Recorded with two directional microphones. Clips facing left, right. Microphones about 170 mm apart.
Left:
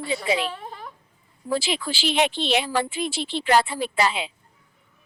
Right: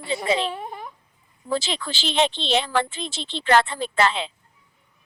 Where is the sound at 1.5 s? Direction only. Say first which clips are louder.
Left 1 dB; 10° left (ahead or behind).